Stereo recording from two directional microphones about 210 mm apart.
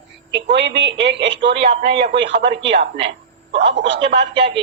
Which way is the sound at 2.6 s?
30° right (ahead or behind).